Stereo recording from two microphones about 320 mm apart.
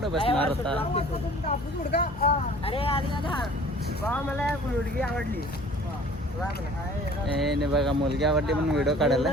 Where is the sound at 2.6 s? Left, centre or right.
Centre.